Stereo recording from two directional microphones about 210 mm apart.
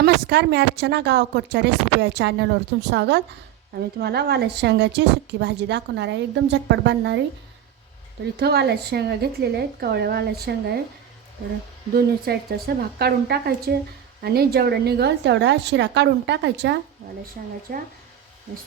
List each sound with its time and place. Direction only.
0.0 s speech: 55° right (ahead or behind)
8.4 s speech: 50° right (ahead or behind)
11.9 s a woman's voice: 45° right (ahead or behind)
17.4 s speech: 40° right (ahead or behind)